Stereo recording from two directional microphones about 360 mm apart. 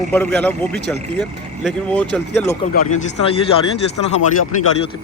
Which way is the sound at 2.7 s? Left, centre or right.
Left.